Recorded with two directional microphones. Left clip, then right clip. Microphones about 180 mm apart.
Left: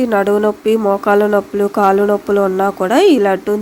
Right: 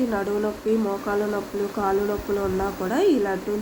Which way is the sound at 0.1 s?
60° left (ahead or behind).